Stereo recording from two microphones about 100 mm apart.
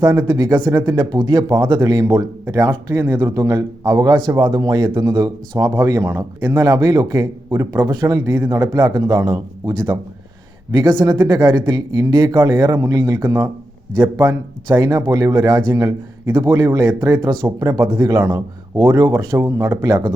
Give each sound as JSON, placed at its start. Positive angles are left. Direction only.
{"t": 0.0, "sound": "speech", "side_deg": -25}
{"t": 0.3, "sound": "a man's voice", "side_deg": -40}
{"t": 1.5, "sound": "a man's voice", "side_deg": -35}
{"t": 16.2, "sound": "speech", "side_deg": -30}
{"t": 18.9, "sound": "speech", "side_deg": -25}